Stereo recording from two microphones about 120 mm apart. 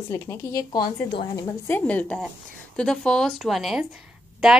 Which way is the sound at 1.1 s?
45° left (ahead or behind).